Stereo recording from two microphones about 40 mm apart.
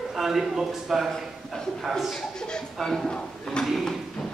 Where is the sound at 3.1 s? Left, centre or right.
Left.